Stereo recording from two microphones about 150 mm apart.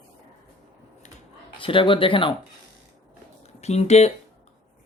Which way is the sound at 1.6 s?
35° left (ahead or behind).